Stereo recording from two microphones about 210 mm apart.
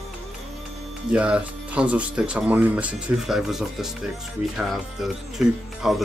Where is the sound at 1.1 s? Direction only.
5° right (ahead or behind).